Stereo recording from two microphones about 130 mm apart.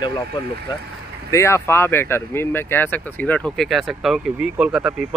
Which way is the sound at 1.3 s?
20° left (ahead or behind).